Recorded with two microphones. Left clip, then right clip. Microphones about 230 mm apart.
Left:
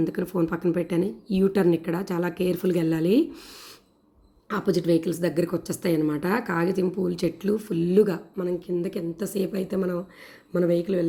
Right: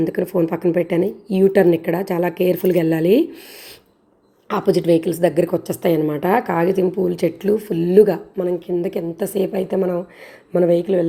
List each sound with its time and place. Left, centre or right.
0.0 s speech: left
0.4 s a woman's voice: centre
2.0 s speech: left
2.5 s a woman's voice: centre
4.4 s a woman's voice: centre